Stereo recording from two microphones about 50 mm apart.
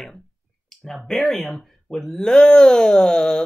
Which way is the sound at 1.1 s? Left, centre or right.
Centre.